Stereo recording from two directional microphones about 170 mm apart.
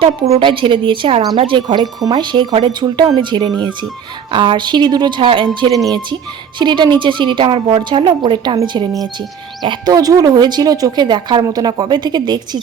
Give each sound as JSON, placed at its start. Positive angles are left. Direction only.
{"t": 0.0, "sound": "a woman's voice", "side_deg": -30}